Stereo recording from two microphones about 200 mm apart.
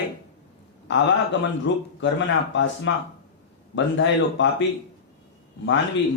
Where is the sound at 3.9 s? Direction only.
70° left (ahead or behind).